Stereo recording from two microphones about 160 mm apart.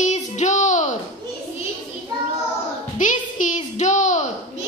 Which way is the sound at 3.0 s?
50° left (ahead or behind).